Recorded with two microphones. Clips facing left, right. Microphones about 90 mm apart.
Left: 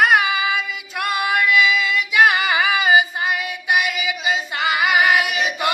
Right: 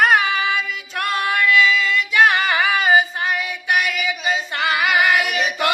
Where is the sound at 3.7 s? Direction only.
10° left (ahead or behind).